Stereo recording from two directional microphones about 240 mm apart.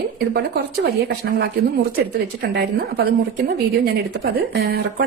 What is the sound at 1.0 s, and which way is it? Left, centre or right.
Speech, right.